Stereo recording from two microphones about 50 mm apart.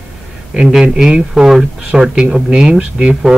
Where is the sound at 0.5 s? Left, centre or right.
Centre.